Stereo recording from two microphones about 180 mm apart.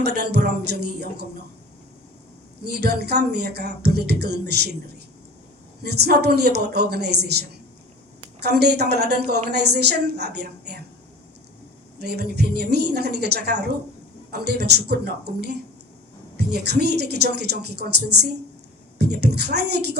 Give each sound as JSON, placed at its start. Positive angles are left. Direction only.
{"t": 0.0, "sound": "speech", "side_deg": -65}
{"t": 2.6, "sound": "speech", "side_deg": -65}
{"t": 5.8, "sound": "a woman's voice", "side_deg": -65}
{"t": 11.9, "sound": "speech", "side_deg": -65}